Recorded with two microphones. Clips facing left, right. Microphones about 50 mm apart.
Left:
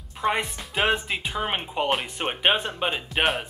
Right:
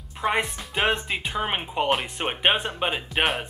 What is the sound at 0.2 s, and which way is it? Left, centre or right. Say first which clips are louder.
Speech: right 1 dB; centre.